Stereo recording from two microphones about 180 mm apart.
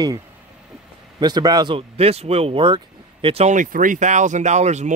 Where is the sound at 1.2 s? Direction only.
20° right (ahead or behind).